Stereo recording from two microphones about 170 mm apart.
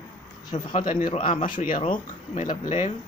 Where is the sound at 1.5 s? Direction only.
55° left (ahead or behind).